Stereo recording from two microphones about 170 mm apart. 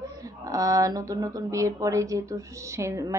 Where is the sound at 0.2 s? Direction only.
20° right (ahead or behind).